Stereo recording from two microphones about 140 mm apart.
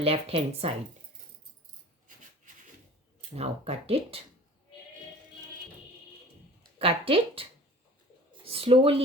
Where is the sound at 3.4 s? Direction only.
45° right (ahead or behind).